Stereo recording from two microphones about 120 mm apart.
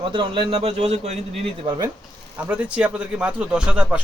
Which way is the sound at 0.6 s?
65° right (ahead or behind).